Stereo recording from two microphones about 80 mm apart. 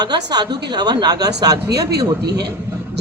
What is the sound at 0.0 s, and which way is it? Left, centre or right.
A man's voice, right.